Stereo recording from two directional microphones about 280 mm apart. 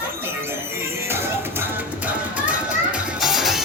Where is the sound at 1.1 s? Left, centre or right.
Centre.